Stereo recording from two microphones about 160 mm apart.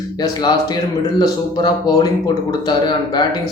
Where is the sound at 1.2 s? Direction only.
25° left (ahead or behind).